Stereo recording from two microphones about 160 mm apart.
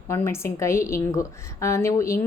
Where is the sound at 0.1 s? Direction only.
15° left (ahead or behind).